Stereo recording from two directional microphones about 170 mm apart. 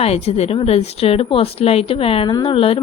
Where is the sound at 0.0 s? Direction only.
35° left (ahead or behind).